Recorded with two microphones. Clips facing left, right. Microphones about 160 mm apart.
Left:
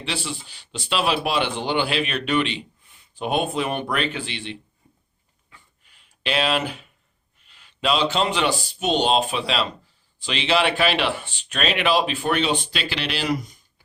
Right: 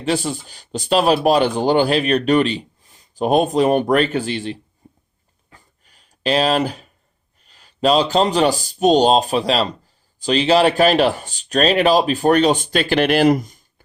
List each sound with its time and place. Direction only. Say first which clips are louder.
0.0 s speech: right 9 dB; 45° right (ahead or behind)
4.8 s a sound: right 9 dB; 40° right (ahead or behind)
7.4 s speech: right 7 dB; 40° right (ahead or behind)